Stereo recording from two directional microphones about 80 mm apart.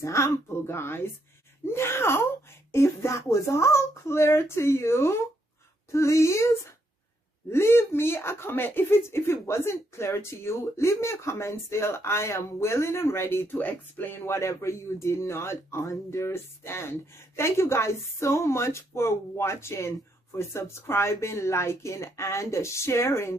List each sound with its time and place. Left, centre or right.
0.0 s speech: left